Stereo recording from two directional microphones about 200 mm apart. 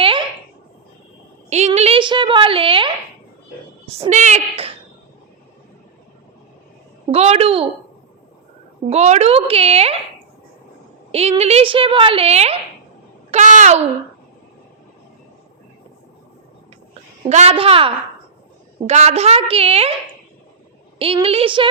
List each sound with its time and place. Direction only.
0.0 s a sound: 25° right (ahead or behind)
1.5 s a sound: 35° right (ahead or behind)
3.8 s a woman's voice: 30° right (ahead or behind)
7.1 s a woman's voice: 30° right (ahead or behind)
8.9 s a woman's voice: 35° right (ahead or behind)
11.1 s a woman's voice: 30° right (ahead or behind)
17.2 s a woman's voice: 35° right (ahead or behind)
21.0 s a woman's voice: 30° right (ahead or behind)